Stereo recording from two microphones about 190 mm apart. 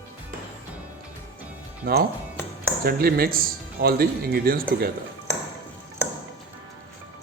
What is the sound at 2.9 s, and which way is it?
Speech, 55° right (ahead or behind).